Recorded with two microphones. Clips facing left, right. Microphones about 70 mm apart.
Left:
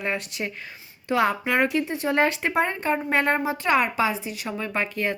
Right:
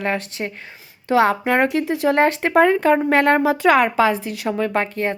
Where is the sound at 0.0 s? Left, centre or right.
Right.